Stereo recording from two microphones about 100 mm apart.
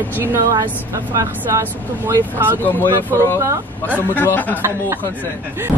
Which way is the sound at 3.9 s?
15° left (ahead or behind).